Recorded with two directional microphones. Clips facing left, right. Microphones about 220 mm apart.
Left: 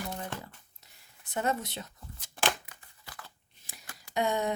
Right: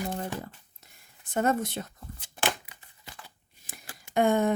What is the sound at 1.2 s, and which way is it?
Speech, 50° right (ahead or behind).